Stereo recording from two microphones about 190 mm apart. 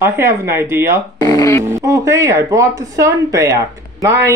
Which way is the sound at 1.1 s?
15° left (ahead or behind).